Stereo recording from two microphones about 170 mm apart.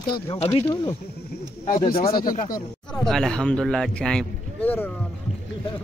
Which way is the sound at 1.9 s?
60° left (ahead or behind).